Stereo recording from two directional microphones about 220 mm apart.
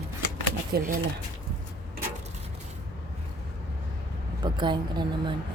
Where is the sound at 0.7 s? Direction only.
45° right (ahead or behind).